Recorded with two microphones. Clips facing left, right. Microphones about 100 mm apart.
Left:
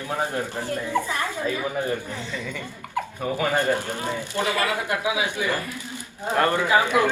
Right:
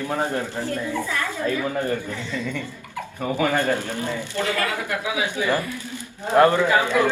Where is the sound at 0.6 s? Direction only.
15° left (ahead or behind).